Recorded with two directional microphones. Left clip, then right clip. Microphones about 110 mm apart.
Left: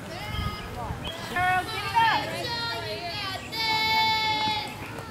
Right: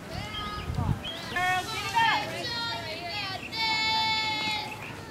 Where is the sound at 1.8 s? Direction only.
35° right (ahead or behind).